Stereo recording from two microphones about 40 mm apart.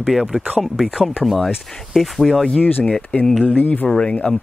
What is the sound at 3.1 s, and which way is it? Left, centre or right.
Speech, left.